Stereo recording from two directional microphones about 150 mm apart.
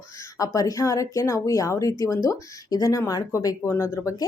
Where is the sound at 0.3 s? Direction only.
25° left (ahead or behind).